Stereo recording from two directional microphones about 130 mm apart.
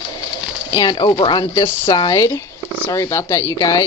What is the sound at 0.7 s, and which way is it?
Speech, 35° left (ahead or behind).